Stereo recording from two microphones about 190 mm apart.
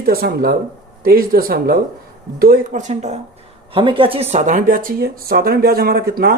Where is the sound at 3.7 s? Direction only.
25° right (ahead or behind).